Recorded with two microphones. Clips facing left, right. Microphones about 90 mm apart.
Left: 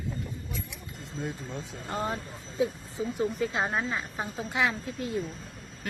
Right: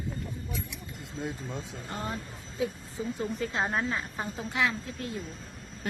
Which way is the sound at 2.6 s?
20° left (ahead or behind).